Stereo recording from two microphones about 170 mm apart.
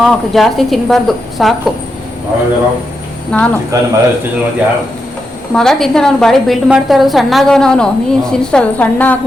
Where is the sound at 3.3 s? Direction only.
5° left (ahead or behind).